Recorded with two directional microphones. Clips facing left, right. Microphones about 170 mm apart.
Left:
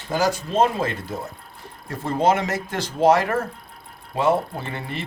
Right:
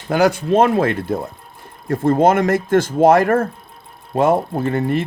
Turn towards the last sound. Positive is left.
turn(degrees=-50)  # may be behind; listen again after turning